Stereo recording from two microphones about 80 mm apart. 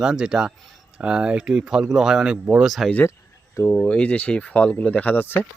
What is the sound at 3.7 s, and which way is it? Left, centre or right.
Speech, centre.